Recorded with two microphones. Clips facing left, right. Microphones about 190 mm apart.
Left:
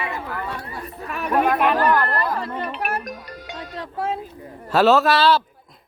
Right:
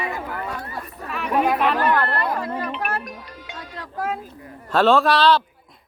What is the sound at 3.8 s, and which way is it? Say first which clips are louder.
Speech: left 1 dB; 25° left (ahead or behind).